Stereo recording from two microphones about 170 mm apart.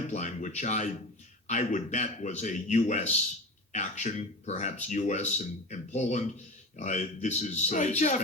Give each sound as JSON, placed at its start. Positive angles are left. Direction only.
{"t": 0.1, "sound": "speech", "side_deg": 45}